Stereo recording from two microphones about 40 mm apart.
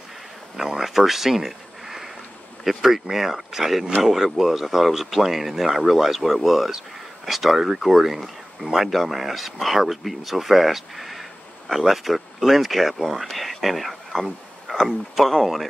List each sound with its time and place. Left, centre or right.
0.6 s speech: centre
13.3 s a sound: centre
15.4 s speech: centre